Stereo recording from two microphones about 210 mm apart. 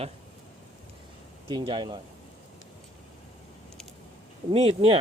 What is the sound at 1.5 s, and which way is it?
Speech, 20° right (ahead or behind).